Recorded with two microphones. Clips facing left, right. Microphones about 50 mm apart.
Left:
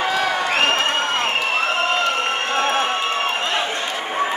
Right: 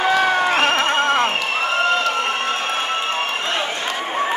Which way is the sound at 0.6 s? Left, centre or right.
Right.